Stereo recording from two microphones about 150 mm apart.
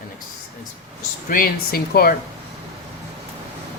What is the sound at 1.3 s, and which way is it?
Speech, 75° left (ahead or behind).